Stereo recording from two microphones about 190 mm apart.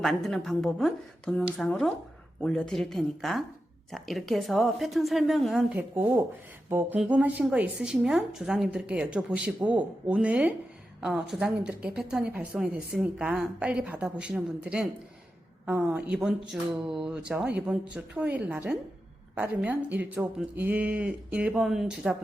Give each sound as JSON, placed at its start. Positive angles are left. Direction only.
{"t": 0.0, "sound": "a woman's voice", "side_deg": 0}